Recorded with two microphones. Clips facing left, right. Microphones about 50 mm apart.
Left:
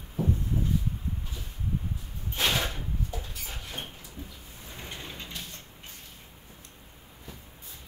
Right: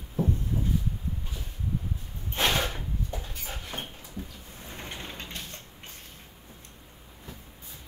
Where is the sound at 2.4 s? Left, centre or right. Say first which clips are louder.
Right 2 dB; right.